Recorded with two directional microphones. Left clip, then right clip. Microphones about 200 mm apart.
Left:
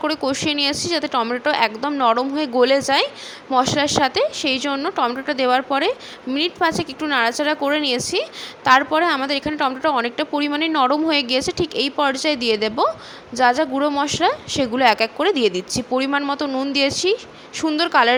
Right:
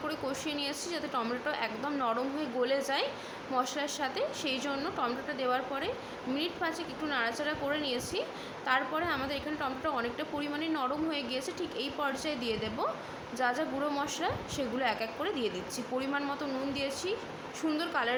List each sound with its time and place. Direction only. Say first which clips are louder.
0.0 s a woman's voice: left 14 dB; 45° left (ahead or behind)